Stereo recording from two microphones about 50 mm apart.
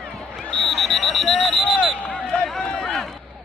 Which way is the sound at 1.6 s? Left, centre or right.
Centre.